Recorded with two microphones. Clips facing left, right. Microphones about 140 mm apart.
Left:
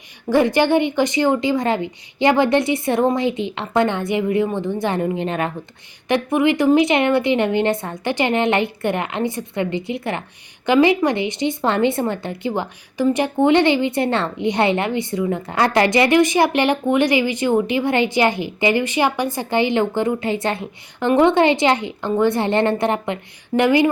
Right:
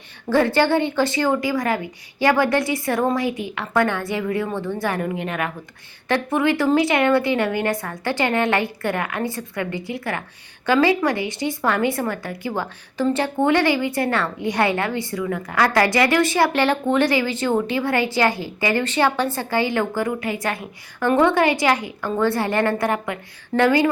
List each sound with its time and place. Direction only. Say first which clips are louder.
0.3 s a woman's voice: left 2 dB; 15° left (ahead or behind)
6.1 s a woman's voice: left 3 dB; 20° left (ahead or behind)